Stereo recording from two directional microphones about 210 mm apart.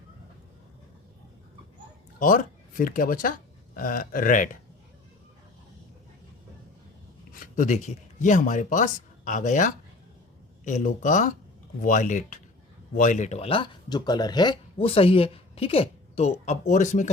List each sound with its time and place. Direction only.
2.1 s speech: 40° left (ahead or behind)
7.3 s speech: 40° left (ahead or behind)